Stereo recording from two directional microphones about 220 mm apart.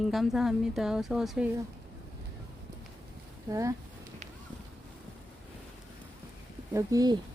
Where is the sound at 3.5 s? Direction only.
15° right (ahead or behind).